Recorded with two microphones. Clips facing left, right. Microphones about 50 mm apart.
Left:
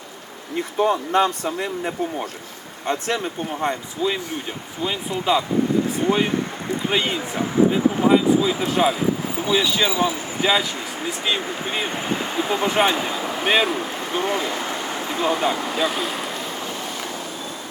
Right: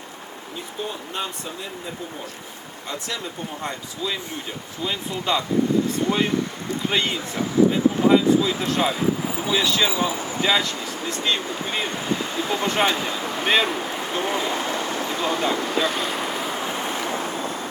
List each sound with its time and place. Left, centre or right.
0.5 s speech: left
2.8 s speech: left
3.6 s speech: left
4.8 s speech: centre
11.9 s speech: left
12.5 s speech: centre
14.3 s speech: right
14.6 s vehicle: left
15.2 s speech: centre
16.6 s waves: right